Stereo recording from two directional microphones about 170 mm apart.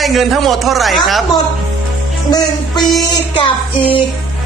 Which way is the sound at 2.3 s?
20° left (ahead or behind).